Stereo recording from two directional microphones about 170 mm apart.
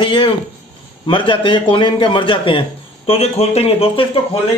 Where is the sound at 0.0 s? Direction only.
30° left (ahead or behind).